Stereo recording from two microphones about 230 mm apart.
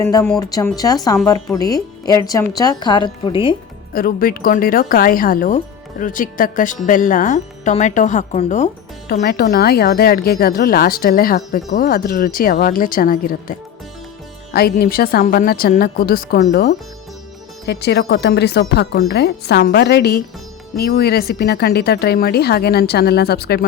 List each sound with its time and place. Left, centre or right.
0.0 s a woman's voice: centre
3.9 s speech: left
9.2 s speech: left
14.5 s speech: left